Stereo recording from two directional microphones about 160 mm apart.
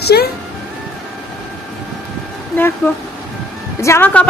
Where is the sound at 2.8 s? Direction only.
15° left (ahead or behind).